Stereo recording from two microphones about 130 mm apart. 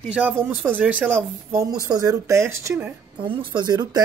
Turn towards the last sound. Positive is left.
turn(degrees=-30)  # may be behind; listen again after turning